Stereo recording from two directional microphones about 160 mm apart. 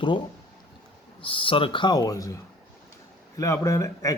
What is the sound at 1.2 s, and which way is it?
Speech, 35° left (ahead or behind).